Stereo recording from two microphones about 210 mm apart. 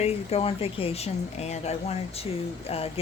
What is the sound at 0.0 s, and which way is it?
A woman's voice, 30° left (ahead or behind).